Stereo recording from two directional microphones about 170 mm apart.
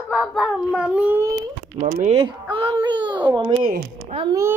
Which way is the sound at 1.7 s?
45° right (ahead or behind).